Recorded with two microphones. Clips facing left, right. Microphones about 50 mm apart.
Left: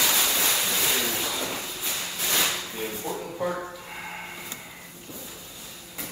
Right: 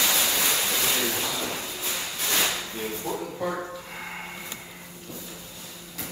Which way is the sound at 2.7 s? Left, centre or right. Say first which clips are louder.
Right 1 dB; centre.